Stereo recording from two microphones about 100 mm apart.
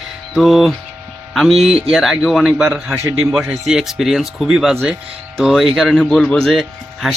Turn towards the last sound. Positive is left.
turn(degrees=0)  # may be behind; listen again after turning